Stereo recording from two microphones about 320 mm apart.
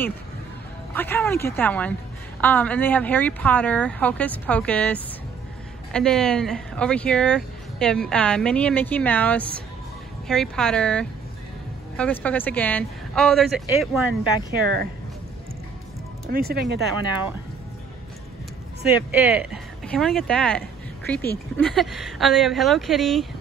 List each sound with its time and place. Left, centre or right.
0.9 s speech: centre
16.3 s speech: right
18.9 s speech: centre